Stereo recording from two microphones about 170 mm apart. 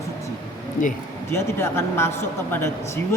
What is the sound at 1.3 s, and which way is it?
A man's voice, 15° left (ahead or behind).